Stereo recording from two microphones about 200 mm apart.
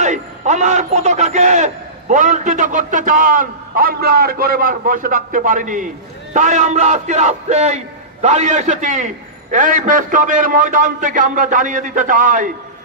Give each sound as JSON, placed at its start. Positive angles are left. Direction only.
{"t": 0.0, "sound": "a man's voice", "side_deg": -35}